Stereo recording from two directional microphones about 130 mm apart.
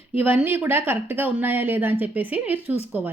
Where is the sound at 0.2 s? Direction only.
15° right (ahead or behind).